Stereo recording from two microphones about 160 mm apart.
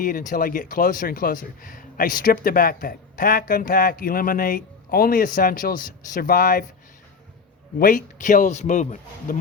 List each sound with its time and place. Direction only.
0.0 s speech: 55° left (ahead or behind)
7.8 s a man's voice: 55° left (ahead or behind)